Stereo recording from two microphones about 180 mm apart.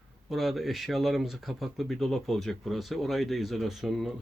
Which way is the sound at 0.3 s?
Centre (ahead or behind).